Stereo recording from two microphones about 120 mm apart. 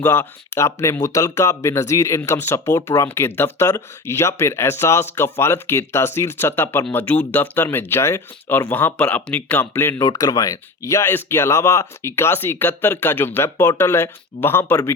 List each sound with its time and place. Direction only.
0.0 s speech: 20° left (ahead or behind)
10.0 s speech: 30° left (ahead or behind)